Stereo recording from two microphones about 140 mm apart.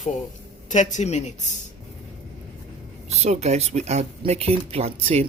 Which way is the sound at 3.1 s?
50° right (ahead or behind).